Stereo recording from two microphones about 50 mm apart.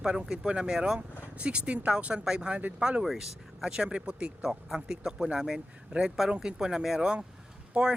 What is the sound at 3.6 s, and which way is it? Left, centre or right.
Speech, centre.